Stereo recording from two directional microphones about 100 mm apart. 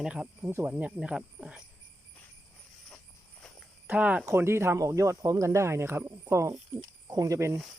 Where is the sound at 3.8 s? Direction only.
15° right (ahead or behind).